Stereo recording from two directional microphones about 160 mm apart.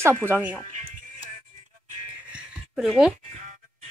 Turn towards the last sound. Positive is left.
turn(degrees=-5)  # may be behind; listen again after turning